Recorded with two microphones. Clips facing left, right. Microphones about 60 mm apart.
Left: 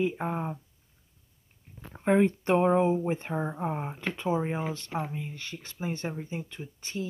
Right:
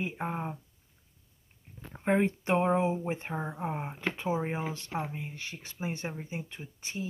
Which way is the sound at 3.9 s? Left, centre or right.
Centre.